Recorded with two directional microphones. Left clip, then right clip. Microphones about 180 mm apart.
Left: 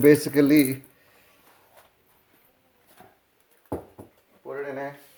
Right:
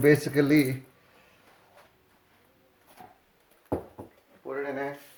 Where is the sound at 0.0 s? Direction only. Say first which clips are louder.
Left 4 dB; 45° left (ahead or behind).